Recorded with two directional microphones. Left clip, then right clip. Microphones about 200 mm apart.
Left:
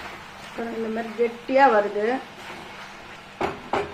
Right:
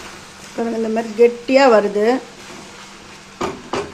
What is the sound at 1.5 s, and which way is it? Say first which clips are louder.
Speech: right 6 dB; 45° right (ahead or behind).